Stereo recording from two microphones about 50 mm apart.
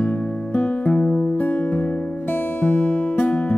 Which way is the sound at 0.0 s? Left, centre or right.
Left.